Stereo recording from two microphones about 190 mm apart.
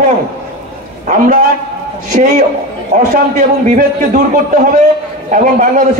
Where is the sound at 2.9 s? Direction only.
45° right (ahead or behind).